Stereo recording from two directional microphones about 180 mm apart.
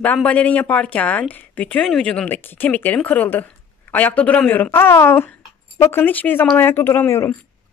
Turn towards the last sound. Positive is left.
turn(degrees=15)  # may be behind; listen again after turning